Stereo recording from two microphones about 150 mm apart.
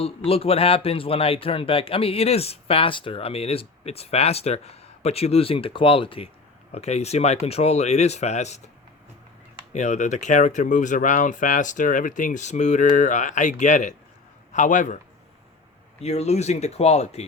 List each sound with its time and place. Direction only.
0.3 s speech: 40° left (ahead or behind)
9.7 s speech: 50° left (ahead or behind)
16.0 s speech: 45° left (ahead or behind)